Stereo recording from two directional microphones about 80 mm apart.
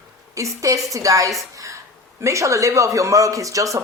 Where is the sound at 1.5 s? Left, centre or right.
Right.